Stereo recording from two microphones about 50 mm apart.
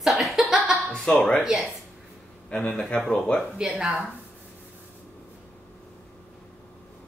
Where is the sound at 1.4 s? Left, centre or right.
Centre.